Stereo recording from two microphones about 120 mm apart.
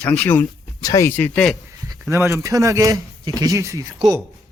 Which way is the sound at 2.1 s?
25° right (ahead or behind).